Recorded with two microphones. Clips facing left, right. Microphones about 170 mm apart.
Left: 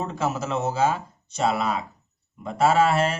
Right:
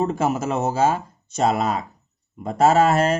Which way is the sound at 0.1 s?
50° right (ahead or behind).